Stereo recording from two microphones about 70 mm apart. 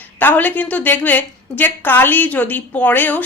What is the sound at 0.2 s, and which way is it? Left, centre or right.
A woman's voice, left.